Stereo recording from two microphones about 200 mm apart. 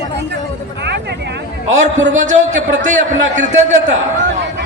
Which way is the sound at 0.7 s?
55° right (ahead or behind).